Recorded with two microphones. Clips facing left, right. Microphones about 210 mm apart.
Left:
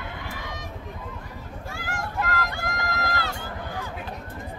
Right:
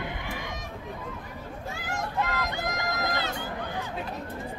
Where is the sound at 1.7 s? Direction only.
20° right (ahead or behind).